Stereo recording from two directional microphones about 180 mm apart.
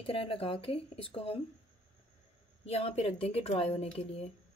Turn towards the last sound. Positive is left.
turn(degrees=35)  # may be behind; listen again after turning